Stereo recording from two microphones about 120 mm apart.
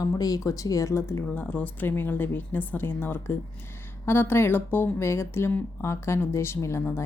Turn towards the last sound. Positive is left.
turn(degrees=20)  # may be behind; listen again after turning